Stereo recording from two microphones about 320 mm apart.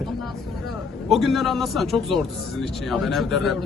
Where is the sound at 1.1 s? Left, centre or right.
Centre.